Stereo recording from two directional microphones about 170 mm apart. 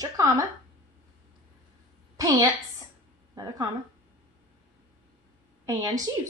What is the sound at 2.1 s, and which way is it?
Speech, 20° right (ahead or behind).